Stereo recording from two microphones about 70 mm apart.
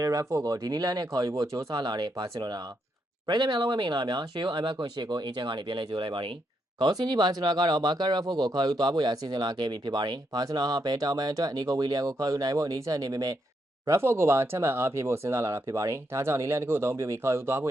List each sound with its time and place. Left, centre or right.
0.0 s speech: right
13.8 s speech: right